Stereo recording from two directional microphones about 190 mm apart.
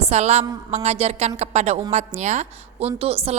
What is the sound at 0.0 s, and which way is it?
A woman's voice, 35° right (ahead or behind).